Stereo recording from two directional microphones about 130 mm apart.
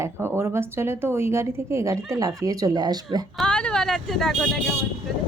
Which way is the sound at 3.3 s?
5° left (ahead or behind).